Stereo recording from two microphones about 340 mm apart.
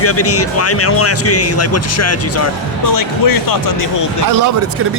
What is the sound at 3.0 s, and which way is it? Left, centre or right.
Speech, left.